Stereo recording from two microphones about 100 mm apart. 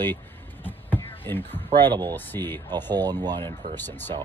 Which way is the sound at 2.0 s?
20° left (ahead or behind).